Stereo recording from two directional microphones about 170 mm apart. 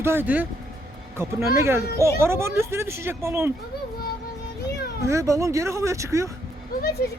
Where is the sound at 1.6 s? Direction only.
15° right (ahead or behind).